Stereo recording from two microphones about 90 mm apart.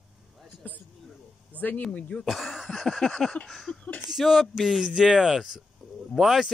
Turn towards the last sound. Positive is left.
turn(degrees=-5)  # may be behind; listen again after turning